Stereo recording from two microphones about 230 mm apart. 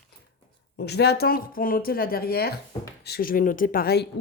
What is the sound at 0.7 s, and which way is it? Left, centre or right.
A woman's voice, left.